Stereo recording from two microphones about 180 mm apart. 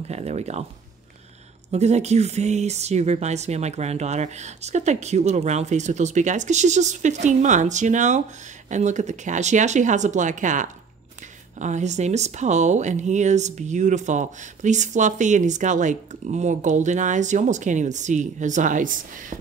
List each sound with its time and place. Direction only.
0.1 s speech: 40° right (ahead or behind)
1.7 s speech: 40° right (ahead or behind)